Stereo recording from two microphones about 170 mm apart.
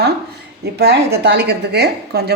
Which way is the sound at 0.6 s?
75° right (ahead or behind).